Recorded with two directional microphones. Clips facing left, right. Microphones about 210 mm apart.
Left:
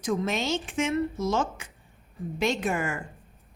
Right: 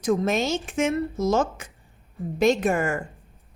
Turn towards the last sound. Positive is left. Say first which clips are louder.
# right 5 dB
turn(degrees=-45)  # may be behind; listen again after turning